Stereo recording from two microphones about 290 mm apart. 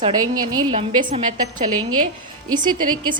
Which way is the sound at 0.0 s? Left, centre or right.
Centre.